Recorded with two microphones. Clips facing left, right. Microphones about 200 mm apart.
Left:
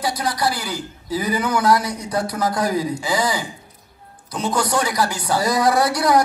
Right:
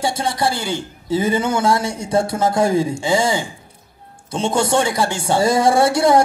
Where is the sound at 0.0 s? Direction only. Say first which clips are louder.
Right 2 dB; 25° right (ahead or behind).